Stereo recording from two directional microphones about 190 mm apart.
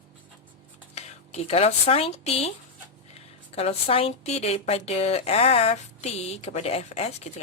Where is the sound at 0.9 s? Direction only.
35° left (ahead or behind).